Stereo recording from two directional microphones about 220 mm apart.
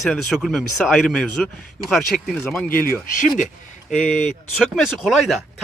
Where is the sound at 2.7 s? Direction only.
40° left (ahead or behind).